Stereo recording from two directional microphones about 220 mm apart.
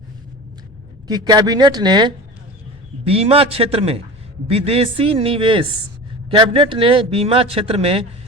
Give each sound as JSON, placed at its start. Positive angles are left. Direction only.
{"t": 1.0, "sound": "a man's voice", "side_deg": -15}